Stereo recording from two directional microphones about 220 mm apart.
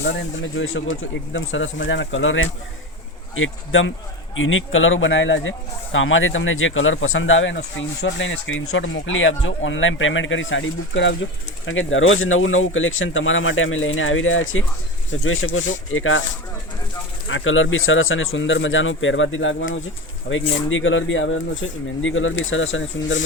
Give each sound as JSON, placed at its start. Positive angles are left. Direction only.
{"t": 0.0, "sound": "speech", "side_deg": 55}
{"t": 17.2, "sound": "speech", "side_deg": 60}